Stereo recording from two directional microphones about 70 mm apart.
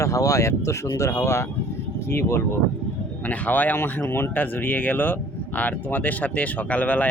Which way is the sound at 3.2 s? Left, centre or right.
Left.